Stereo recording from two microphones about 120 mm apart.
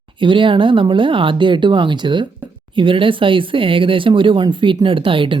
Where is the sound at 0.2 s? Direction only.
45° right (ahead or behind).